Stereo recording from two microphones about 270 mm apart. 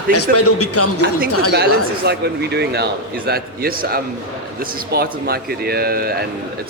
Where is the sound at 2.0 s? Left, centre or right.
Right.